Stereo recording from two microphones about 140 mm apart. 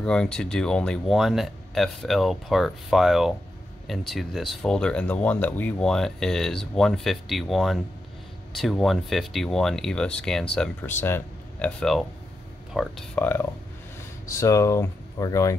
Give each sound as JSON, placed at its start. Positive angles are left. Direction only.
{"t": 0.0, "sound": "speech", "side_deg": 5}
{"t": 11.8, "sound": "speech", "side_deg": 0}